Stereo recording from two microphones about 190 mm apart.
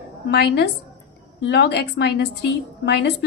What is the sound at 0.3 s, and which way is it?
A woman's voice, 60° left (ahead or behind).